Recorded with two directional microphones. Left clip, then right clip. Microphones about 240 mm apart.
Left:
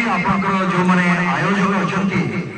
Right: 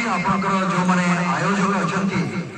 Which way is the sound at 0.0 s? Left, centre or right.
Right.